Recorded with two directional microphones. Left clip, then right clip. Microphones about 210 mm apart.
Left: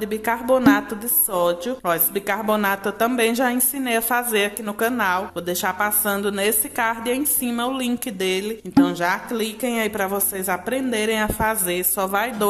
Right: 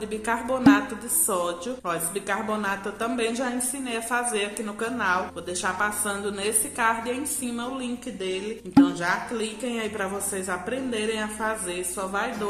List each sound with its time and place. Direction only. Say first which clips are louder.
0.0 s speech: left 4 dB; 30° left (ahead or behind)